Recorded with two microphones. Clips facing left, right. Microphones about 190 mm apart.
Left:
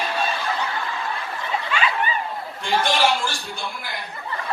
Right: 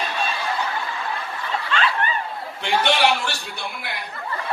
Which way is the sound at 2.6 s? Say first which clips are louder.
Right 1 dB; 65° right (ahead or behind).